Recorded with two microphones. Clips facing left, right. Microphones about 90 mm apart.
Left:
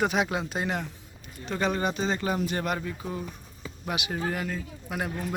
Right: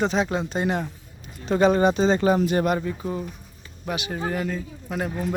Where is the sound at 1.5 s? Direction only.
20° right (ahead or behind).